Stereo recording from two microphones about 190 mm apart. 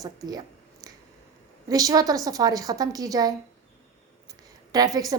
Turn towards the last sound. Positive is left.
turn(degrees=-20)  # may be behind; listen again after turning